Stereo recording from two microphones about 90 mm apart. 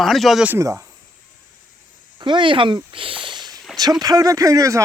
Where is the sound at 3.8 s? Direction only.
45° right (ahead or behind).